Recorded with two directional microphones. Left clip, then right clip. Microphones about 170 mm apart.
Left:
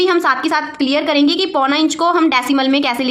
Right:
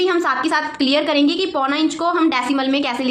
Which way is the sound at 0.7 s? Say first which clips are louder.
Left 1 dB; 15° left (ahead or behind).